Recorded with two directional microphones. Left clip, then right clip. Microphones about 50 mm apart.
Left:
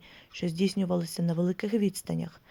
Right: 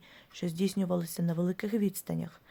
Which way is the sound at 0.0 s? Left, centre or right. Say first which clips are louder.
Left 3 dB; left.